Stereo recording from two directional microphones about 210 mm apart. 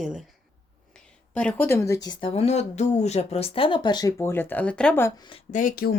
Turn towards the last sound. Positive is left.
turn(degrees=45)  # may be behind; listen again after turning